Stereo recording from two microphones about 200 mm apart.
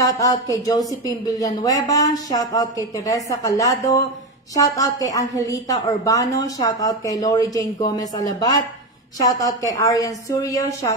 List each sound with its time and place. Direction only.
0.0 s speech: 15° left (ahead or behind)